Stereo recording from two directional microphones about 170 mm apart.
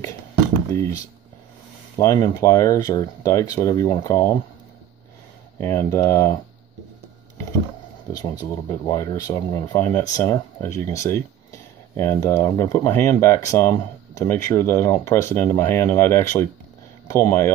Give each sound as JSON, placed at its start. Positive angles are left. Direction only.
{"t": 0.7, "sound": "speech", "side_deg": 15}
{"t": 2.0, "sound": "speech", "side_deg": 20}
{"t": 5.6, "sound": "speech", "side_deg": 15}
{"t": 8.1, "sound": "speech", "side_deg": 20}
{"t": 9.8, "sound": "speech", "side_deg": 10}